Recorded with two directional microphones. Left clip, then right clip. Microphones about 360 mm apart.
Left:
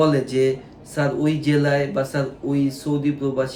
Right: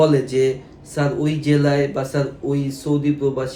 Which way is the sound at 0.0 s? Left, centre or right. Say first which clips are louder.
Right 2 dB; centre.